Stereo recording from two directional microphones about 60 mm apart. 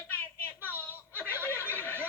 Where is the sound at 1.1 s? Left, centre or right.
Left.